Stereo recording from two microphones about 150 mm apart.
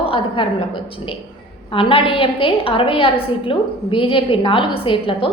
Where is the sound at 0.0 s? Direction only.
35° left (ahead or behind).